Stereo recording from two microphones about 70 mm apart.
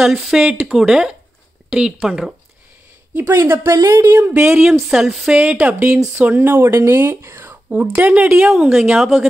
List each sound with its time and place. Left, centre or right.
0.0 s speech: centre
3.2 s a woman's voice: right
4.7 s speech: centre
5.4 s speech: centre
6.8 s speech: right
7.2 s a sound: right
7.7 s speech: centre
8.5 s a woman's voice: centre